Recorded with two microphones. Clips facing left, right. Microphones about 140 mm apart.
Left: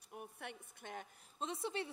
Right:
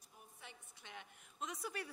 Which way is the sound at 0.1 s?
65° left (ahead or behind).